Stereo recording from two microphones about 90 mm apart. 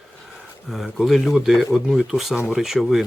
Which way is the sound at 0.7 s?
Centre (ahead or behind).